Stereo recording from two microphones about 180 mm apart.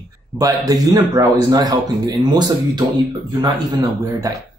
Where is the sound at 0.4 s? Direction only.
20° right (ahead or behind).